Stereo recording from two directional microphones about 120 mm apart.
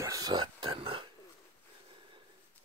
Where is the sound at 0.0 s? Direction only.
30° right (ahead or behind); by 1.0 s 50° right (ahead or behind).